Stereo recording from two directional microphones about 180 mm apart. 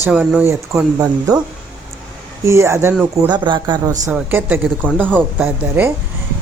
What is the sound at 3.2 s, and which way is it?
Speech, 25° right (ahead or behind).